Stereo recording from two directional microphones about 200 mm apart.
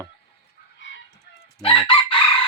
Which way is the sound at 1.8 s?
25° left (ahead or behind).